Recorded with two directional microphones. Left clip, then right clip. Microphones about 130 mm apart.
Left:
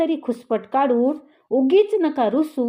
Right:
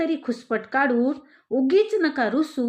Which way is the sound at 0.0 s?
25° left (ahead or behind).